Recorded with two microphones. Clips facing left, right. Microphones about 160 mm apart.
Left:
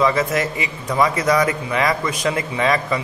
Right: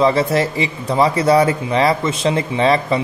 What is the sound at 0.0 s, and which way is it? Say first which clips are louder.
Speech: right 3 dB; 30° right (ahead or behind).